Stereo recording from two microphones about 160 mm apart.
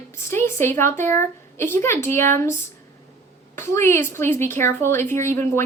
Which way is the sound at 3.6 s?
15° left (ahead or behind).